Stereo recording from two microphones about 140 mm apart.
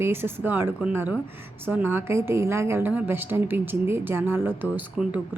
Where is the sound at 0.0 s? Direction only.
15° right (ahead or behind).